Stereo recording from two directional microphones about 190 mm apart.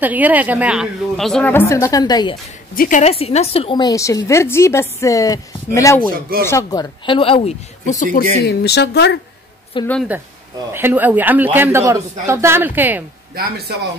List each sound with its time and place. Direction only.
0.0 s a woman's voice: 10° right (ahead or behind); by 2.3 s 20° left (ahead or behind)
2.7 s a woman's voice: 45° left (ahead or behind); by 9.2 s 65° left (ahead or behind)
9.8 s speech: 25° left (ahead or behind)
10.7 s a woman's voice: 10° right (ahead or behind)
13.3 s speech: 55° right (ahead or behind)